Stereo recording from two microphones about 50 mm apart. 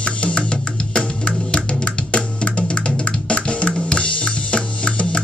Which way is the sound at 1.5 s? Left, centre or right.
Left.